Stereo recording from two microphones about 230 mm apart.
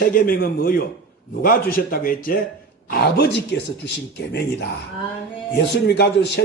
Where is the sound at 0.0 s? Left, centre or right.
Left.